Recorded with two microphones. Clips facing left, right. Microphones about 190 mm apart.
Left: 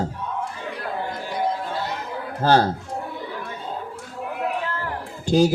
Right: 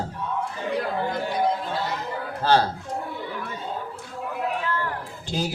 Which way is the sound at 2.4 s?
45° left (ahead or behind).